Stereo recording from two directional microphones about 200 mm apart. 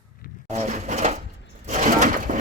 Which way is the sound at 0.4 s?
35° right (ahead or behind).